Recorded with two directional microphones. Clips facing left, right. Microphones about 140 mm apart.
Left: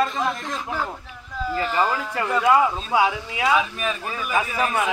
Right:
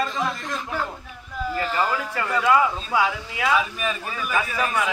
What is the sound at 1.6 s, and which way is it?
Speech, centre (ahead or behind).